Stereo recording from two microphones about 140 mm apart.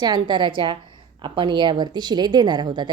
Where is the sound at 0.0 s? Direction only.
30° right (ahead or behind).